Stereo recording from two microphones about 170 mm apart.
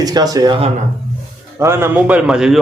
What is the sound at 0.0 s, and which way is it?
Speech, 20° right (ahead or behind).